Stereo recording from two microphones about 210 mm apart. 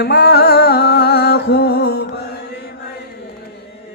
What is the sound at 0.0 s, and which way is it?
Music, 50° left (ahead or behind).